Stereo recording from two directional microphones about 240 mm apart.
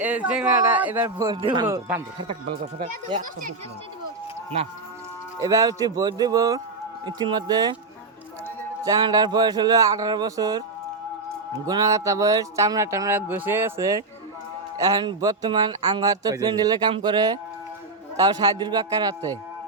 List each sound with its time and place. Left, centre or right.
0.0 s speech: centre
3.1 s speech: centre
5.4 s speech: centre
8.8 s speech: centre
11.6 s speech: centre